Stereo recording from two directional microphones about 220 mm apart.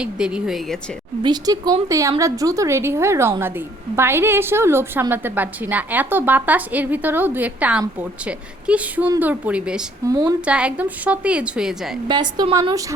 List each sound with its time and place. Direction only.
0.0 s a woman's voice: 5° right (ahead or behind)
1.2 s a woman's voice: 20° right (ahead or behind)
10.1 s a woman's voice: 20° right (ahead or behind)
10.4 s a woman's voice: 5° right (ahead or behind)
12.0 s a woman's voice: 20° right (ahead or behind)